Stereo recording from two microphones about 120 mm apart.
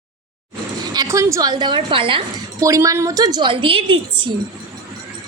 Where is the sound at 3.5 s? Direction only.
45° right (ahead or behind).